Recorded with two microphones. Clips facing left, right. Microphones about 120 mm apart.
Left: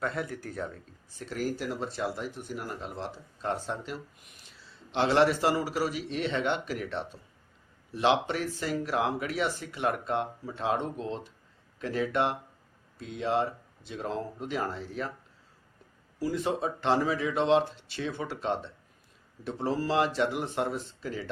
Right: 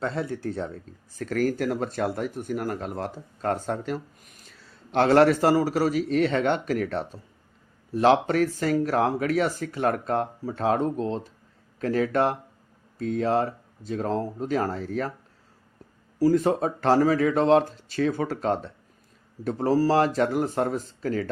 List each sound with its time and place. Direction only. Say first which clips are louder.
0.0 s speech: right 5 dB; 30° right (ahead or behind)
1.1 s speech: right 8 dB; 50° right (ahead or behind)
16.1 s speech: right 9 dB; 40° right (ahead or behind)